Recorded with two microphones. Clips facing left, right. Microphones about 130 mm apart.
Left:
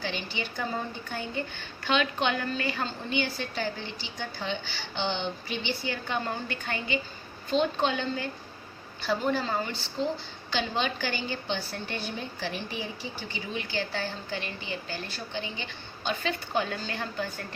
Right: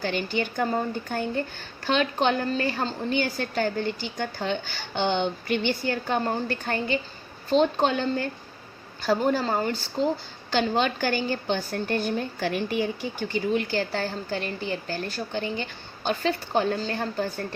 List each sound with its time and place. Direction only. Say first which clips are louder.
0.0 s speech: right 7 dB; 50° right (ahead or behind)